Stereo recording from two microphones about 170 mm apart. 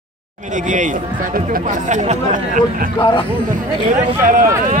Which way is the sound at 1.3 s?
55° right (ahead or behind).